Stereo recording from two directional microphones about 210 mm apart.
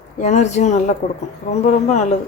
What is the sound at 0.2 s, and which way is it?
Speech, 35° left (ahead or behind).